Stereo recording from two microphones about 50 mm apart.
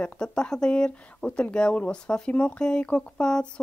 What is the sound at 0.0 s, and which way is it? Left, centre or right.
Speech, left.